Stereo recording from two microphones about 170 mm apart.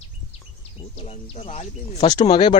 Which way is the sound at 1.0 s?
35° left (ahead or behind).